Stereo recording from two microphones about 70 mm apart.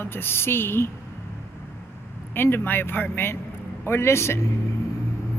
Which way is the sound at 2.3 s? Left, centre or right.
Left.